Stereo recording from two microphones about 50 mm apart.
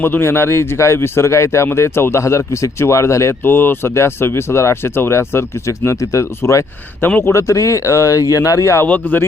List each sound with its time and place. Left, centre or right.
0.0 s speech: left
1.6 s speech: left
2.2 s speech: left
3.4 s speech: left
3.9 s speech: left
7.0 s speech: left
7.3 s speech: left
8.9 s a man's voice: left